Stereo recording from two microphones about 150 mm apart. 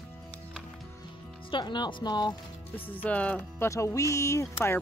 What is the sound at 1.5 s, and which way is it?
Speech, 30° left (ahead or behind).